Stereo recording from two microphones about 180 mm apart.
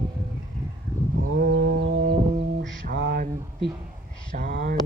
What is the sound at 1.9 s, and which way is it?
Music, 50° right (ahead or behind).